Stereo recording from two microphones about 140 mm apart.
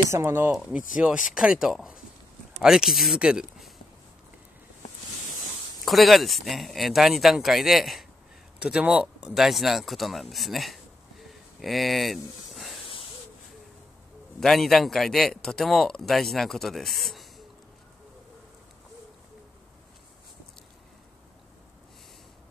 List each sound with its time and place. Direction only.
0.1 s speech: 15° right (ahead or behind)
0.5 s speech: 5° right (ahead or behind)
5.9 s speech: centre (ahead or behind)
10.3 s a sound: centre (ahead or behind)
14.4 s speech: centre (ahead or behind)